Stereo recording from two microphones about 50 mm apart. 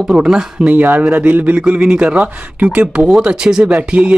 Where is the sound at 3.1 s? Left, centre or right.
Centre.